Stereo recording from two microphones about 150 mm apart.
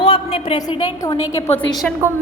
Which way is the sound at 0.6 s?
30° left (ahead or behind).